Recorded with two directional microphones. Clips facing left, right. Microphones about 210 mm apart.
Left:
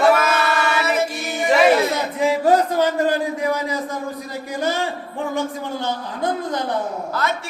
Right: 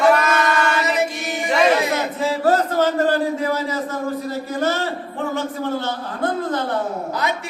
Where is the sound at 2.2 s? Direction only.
15° left (ahead or behind).